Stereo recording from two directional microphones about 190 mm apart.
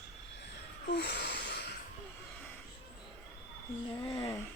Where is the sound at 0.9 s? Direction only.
60° left (ahead or behind).